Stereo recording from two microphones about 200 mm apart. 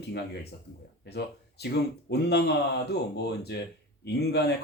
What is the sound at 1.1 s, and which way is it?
Speech, 55° left (ahead or behind).